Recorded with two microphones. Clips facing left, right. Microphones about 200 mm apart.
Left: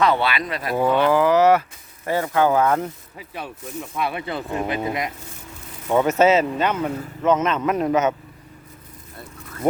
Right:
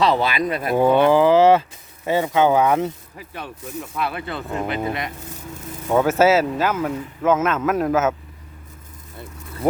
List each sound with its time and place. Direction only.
0.1 s speech: 45° right (ahead or behind)
0.7 s speech: 25° right (ahead or behind)
3.2 s speech: centre (ahead or behind)